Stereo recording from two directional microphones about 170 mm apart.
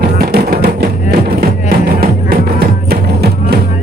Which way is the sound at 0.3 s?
70° right (ahead or behind).